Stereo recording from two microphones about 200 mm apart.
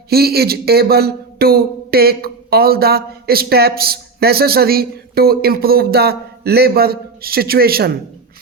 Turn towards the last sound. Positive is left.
turn(degrees=-50)  # may be behind; listen again after turning